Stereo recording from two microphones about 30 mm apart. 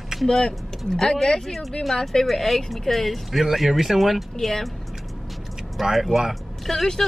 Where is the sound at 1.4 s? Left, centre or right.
Centre.